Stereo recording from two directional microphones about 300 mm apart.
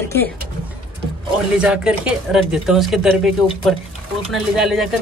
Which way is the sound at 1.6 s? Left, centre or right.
Centre.